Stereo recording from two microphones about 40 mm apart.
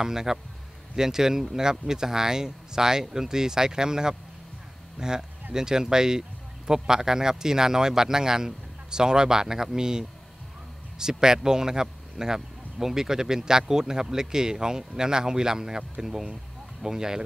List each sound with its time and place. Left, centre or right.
0.0 s speech: centre